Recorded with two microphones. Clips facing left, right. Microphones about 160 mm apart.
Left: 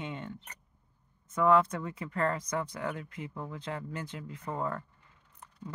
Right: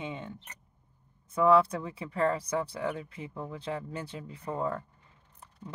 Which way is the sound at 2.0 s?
15° right (ahead or behind).